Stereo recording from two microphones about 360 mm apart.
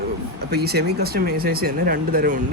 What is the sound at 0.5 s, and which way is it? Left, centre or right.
Speech, right.